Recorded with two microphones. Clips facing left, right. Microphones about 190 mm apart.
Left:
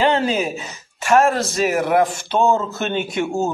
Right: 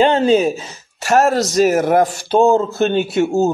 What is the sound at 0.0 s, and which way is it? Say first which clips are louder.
Speech: right 6 dB; 25° right (ahead or behind).